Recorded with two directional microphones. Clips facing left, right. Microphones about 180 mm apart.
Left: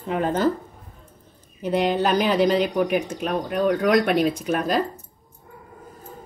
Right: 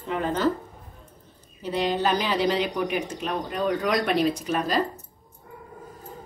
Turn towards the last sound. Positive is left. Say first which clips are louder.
# left 3 dB
turn(degrees=55)  # may be behind; listen again after turning